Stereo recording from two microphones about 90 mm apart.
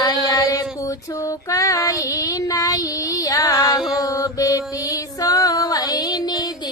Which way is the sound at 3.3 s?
40° left (ahead or behind).